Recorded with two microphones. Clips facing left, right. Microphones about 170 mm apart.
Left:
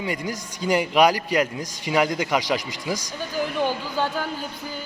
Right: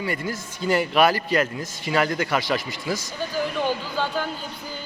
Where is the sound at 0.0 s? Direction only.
15° left (ahead or behind).